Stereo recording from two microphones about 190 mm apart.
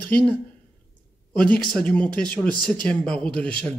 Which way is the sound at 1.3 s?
5° left (ahead or behind).